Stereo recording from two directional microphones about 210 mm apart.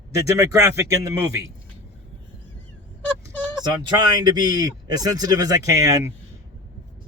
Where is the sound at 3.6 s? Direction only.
20° right (ahead or behind).